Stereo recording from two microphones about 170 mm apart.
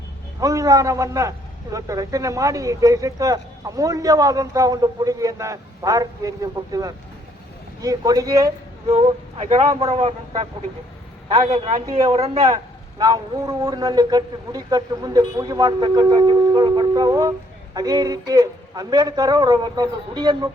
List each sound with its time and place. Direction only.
0.3 s a man's voice: 20° right (ahead or behind)
8.9 s speech: 35° right (ahead or behind)
13.0 s speech: 20° right (ahead or behind)